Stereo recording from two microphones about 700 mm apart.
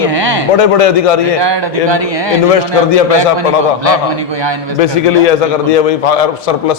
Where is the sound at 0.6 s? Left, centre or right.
Left.